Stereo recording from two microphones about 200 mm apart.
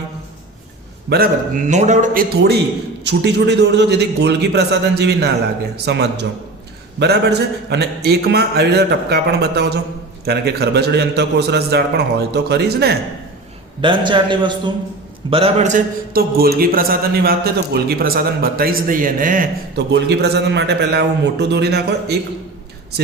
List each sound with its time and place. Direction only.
1.1 s a man's voice: 45° right (ahead or behind)
3.0 s a man's voice: 60° right (ahead or behind)
13.8 s a man's voice: 25° right (ahead or behind); by 22.2 s 55° right (ahead or behind)